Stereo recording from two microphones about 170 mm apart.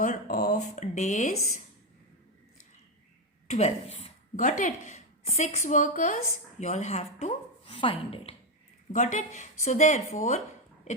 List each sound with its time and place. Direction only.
0.0 s speech: 50° left (ahead or behind)
3.4 s a woman's voice: 40° left (ahead or behind)
4.4 s a woman's voice: 50° left (ahead or behind); by 8.4 s 35° left (ahead or behind)
8.9 s speech: 45° left (ahead or behind)